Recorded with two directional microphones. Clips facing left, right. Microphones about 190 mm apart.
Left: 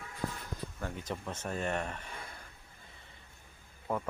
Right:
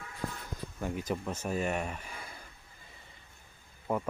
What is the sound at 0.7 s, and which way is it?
Speech, 10° right (ahead or behind).